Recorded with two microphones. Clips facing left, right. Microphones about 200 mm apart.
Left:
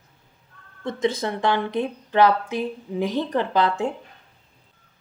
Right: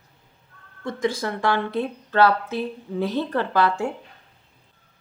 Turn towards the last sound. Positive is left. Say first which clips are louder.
# even
turn(degrees=20)  # may be behind; listen again after turning